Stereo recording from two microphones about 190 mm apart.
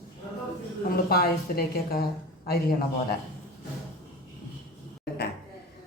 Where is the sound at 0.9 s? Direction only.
55° left (ahead or behind).